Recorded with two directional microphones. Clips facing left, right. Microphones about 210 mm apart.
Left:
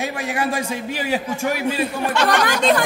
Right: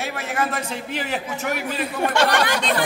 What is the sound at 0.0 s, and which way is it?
A man's voice, 15° left (ahead or behind).